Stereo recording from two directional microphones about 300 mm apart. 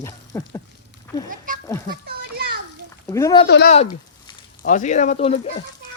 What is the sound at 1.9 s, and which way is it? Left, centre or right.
Children playing, right.